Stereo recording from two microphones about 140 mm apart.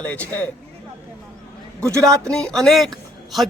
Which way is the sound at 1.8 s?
20° right (ahead or behind).